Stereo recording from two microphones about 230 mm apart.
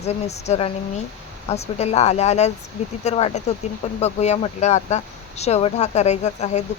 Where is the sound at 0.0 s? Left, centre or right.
Left.